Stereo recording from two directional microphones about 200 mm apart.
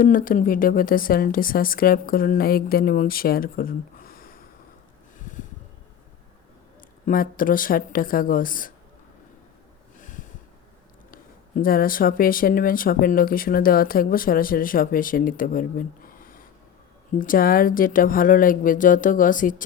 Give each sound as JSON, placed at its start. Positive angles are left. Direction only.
{"t": 0.0, "sound": "speech", "side_deg": 45}
{"t": 7.0, "sound": "speech", "side_deg": 45}
{"t": 11.1, "sound": "speech", "side_deg": 45}
{"t": 16.0, "sound": "a sound", "side_deg": 45}
{"t": 17.2, "sound": "speech", "side_deg": 45}